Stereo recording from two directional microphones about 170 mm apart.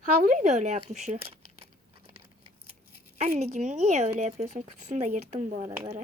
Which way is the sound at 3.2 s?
40° right (ahead or behind).